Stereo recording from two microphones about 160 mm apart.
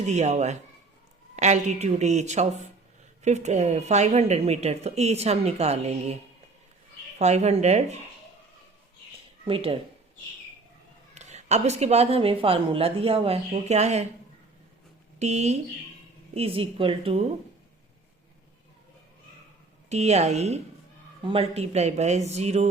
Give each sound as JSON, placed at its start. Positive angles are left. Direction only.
{"t": 0.0, "sound": "a woman's voice", "side_deg": -45}
{"t": 7.2, "sound": "a woman's voice", "side_deg": -45}
{"t": 9.5, "sound": "a woman's voice", "side_deg": -35}
{"t": 11.1, "sound": "a woman's voice", "side_deg": -45}
{"t": 15.2, "sound": "a woman's voice", "side_deg": -45}
{"t": 19.9, "sound": "a woman's voice", "side_deg": -45}